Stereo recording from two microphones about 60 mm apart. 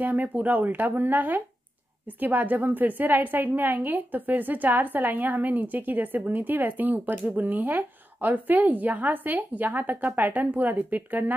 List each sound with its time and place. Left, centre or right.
0.0 s a woman's voice: right